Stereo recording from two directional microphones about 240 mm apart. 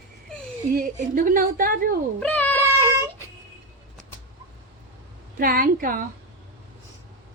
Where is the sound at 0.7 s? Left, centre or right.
Right.